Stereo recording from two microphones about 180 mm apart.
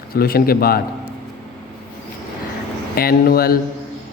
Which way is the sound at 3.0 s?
55° left (ahead or behind).